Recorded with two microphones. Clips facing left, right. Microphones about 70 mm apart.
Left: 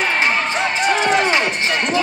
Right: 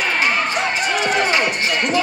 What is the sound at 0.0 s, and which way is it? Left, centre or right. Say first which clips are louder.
Music: left 1 dB; left.